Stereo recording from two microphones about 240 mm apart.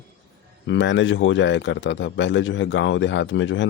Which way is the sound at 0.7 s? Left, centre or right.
Left.